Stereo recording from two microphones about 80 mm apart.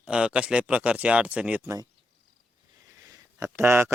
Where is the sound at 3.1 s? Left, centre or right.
Right.